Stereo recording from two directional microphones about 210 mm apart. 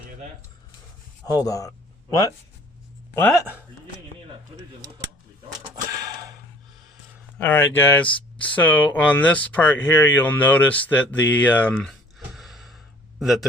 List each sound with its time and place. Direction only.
1.3 s speech: 15° left (ahead or behind)
5.6 s a sound: 15° right (ahead or behind)
7.3 s speech: 10° left (ahead or behind)